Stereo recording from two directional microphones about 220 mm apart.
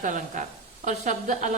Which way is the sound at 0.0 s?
35° right (ahead or behind).